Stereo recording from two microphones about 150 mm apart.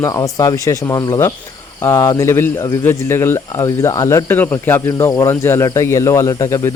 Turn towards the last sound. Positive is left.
turn(degrees=20)  # may be behind; listen again after turning